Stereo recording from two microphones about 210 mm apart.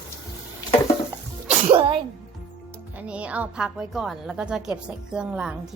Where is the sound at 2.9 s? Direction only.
5° right (ahead or behind).